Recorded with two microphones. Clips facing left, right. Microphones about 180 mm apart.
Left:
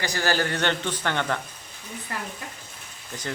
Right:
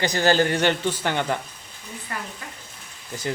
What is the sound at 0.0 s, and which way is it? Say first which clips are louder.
Speech: right 6 dB; 20° right (ahead or behind).